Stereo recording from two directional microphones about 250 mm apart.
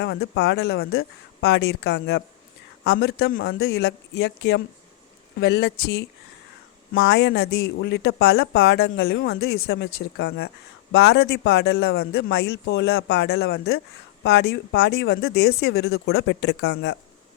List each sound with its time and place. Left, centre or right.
0.0 s a man's voice: left